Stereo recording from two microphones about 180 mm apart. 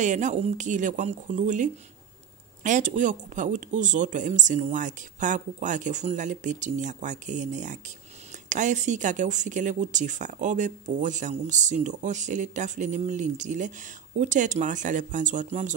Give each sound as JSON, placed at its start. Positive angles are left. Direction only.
{"t": 0.0, "sound": "speech", "side_deg": -40}